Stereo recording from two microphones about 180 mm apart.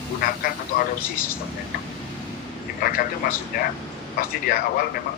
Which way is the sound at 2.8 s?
55° left (ahead or behind).